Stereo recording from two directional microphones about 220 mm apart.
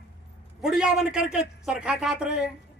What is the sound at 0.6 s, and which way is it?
A man's voice, centre (ahead or behind).